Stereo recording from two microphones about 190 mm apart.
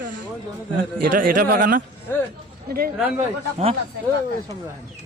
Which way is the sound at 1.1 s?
45° right (ahead or behind).